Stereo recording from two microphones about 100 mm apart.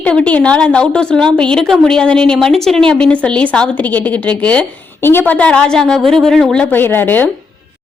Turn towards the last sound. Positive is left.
turn(degrees=20)  # may be behind; listen again after turning